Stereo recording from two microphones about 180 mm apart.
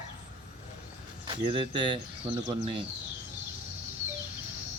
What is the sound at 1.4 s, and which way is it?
Speech, 25° right (ahead or behind).